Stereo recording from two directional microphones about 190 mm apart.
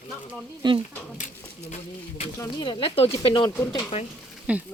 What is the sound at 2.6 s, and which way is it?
Speech, 25° left (ahead or behind).